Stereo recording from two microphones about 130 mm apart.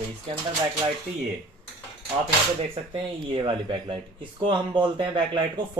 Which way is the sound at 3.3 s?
40° right (ahead or behind).